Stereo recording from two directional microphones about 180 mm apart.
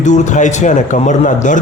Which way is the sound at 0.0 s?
40° left (ahead or behind).